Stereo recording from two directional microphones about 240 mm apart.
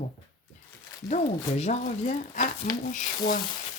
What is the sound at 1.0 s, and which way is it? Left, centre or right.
Speech, left.